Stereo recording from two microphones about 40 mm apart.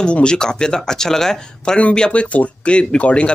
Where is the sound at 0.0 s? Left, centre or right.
Left.